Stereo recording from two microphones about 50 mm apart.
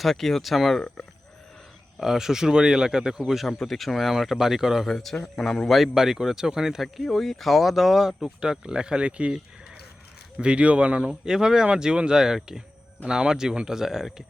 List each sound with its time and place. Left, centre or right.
0.0 s speech: centre
2.0 s speech: centre
4.9 s speech: centre
5.7 s speech: centre
6.8 s speech: centre; by 9.3 s right
10.3 s speech: right
11.1 s speech: centre